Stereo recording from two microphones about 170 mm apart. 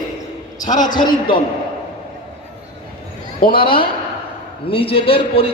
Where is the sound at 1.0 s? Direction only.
30° left (ahead or behind).